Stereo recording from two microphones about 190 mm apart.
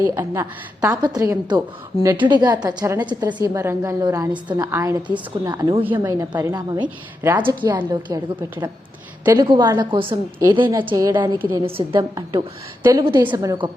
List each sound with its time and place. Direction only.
0.0 s a woman's voice: 15° right (ahead or behind)